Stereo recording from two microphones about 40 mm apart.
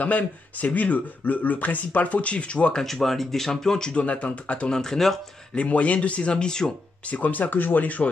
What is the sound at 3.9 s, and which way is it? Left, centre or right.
Speech, left.